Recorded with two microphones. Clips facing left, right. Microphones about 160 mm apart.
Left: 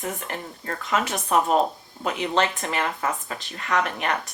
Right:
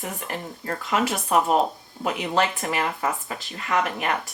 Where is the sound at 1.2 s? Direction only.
20° right (ahead or behind).